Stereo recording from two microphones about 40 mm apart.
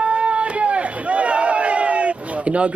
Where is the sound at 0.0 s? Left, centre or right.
Right.